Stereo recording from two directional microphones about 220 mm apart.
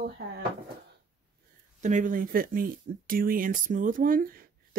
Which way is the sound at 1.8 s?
35° right (ahead or behind).